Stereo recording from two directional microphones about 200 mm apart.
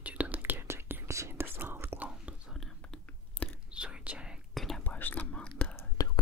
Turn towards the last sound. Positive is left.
turn(degrees=10)  # may be behind; listen again after turning